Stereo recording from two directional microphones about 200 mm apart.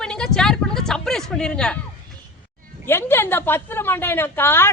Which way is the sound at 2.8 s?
10° left (ahead or behind).